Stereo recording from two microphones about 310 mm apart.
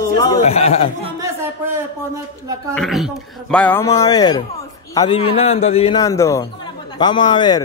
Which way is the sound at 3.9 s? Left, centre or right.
Centre.